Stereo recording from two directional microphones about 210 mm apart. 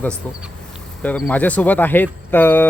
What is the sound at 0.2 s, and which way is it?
Speech, 10° left (ahead or behind).